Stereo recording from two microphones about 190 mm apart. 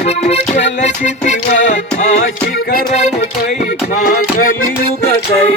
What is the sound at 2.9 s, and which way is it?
Music, 35° left (ahead or behind).